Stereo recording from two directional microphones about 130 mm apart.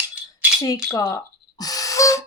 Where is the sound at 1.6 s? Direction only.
30° left (ahead or behind).